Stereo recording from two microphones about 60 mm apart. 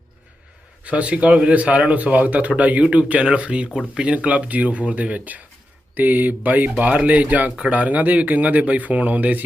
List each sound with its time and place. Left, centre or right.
0.9 s speech: centre